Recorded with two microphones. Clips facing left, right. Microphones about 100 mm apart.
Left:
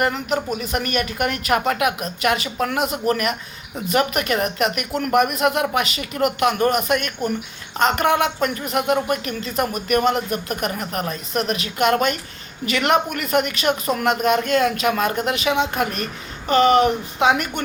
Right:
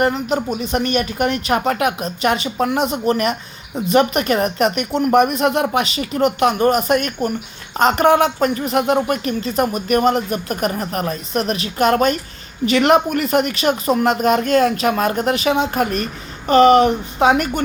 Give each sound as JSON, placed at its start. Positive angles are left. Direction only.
{"t": 0.0, "sound": "speech", "side_deg": -30}